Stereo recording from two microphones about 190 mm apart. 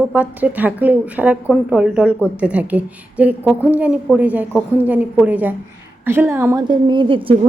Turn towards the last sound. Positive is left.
turn(degrees=-25)  # may be behind; listen again after turning